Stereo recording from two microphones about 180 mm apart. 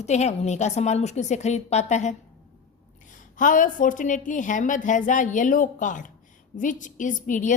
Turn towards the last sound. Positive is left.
turn(degrees=45)  # may be behind; listen again after turning